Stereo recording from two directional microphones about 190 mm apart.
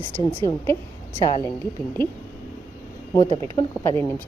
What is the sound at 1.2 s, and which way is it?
Speech, 15° left (ahead or behind).